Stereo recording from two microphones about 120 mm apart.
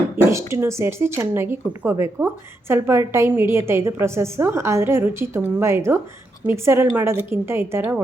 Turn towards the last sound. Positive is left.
turn(degrees=-20)  # may be behind; listen again after turning